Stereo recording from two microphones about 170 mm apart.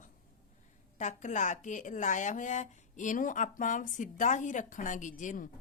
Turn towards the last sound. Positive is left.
turn(degrees=50)  # may be behind; listen again after turning